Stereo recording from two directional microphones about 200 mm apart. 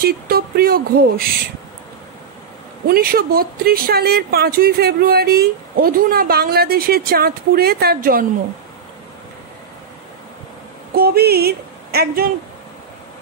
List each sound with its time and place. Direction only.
0.0 s speech: 50° right (ahead or behind)
2.9 s speech: 50° right (ahead or behind)
11.0 s speech: 50° right (ahead or behind)